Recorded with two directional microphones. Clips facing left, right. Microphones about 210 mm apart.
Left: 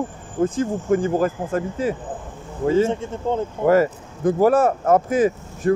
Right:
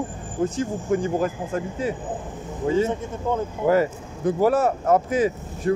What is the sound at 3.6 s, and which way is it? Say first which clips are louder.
Speech: left 3 dB; 50° left (ahead or behind).